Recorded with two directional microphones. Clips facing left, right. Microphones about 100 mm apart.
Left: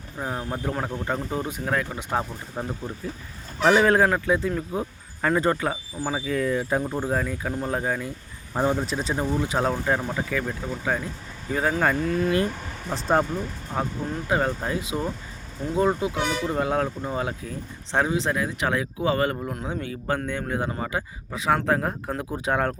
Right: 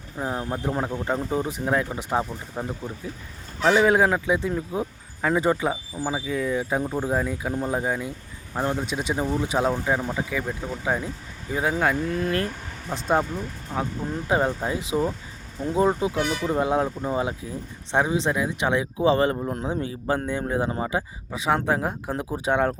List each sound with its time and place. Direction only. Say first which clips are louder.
0.2 s speech: right 2 dB; 5° right (ahead or behind)
8.5 s speech: left 2 dB; 5° left (ahead or behind)
8.9 s speech: even; 10° right (ahead or behind)
14.3 s speech: right 2 dB; 20° right (ahead or behind)